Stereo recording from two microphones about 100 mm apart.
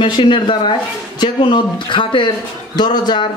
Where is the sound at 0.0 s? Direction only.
60° left (ahead or behind).